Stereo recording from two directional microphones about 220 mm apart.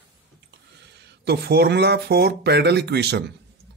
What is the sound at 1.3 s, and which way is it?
Speech, 45° right (ahead or behind).